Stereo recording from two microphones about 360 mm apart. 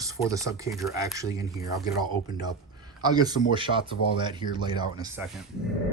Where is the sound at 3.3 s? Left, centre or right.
Left.